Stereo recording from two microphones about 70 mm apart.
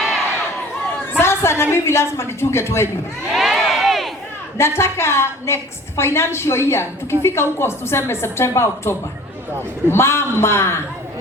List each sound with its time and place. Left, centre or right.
1.1 s a woman's voice: left
3.3 s crowd: centre
4.5 s a woman's voice: left